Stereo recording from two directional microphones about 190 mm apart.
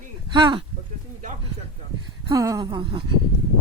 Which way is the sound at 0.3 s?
25° right (ahead or behind).